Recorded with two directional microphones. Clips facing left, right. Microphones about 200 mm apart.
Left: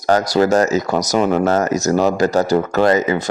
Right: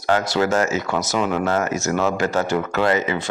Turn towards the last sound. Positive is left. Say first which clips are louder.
# left 5 dB
turn(degrees=40)  # may be behind; listen again after turning